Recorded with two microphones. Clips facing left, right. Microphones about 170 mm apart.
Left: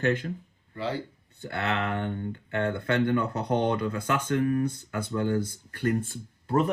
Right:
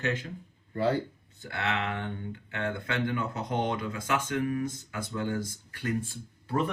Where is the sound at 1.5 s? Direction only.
55° left (ahead or behind).